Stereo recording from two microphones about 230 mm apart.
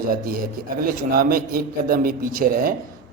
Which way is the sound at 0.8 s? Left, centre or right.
Right.